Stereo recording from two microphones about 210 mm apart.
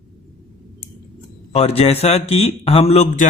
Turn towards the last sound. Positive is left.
turn(degrees=30)  # may be behind; listen again after turning